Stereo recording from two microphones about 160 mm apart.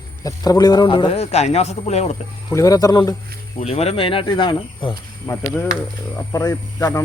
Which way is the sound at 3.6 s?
40° left (ahead or behind).